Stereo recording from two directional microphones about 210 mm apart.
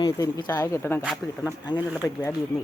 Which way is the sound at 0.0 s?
20° left (ahead or behind).